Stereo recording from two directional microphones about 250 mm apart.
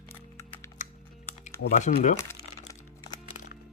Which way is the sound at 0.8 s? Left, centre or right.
Left.